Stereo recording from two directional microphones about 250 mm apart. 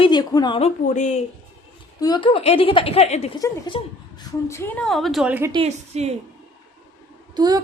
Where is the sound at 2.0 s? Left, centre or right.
Centre.